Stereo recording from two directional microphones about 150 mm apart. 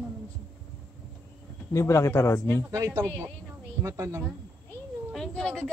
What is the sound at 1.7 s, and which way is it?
Speech, 20° left (ahead or behind).